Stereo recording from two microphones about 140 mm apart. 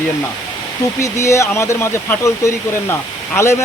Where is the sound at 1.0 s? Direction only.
20° left (ahead or behind).